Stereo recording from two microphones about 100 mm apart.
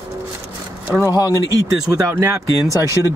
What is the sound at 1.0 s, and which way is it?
Speech, 35° left (ahead or behind).